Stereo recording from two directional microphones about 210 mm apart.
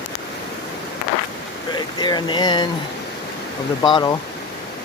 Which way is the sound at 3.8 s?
20° left (ahead or behind).